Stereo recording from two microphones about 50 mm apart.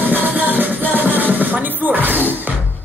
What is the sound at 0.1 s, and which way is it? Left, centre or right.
Music, right.